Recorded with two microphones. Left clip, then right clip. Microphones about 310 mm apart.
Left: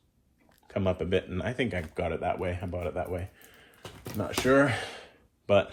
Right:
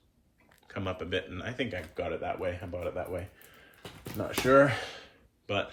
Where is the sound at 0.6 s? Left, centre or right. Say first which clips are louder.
Left 6 dB; centre.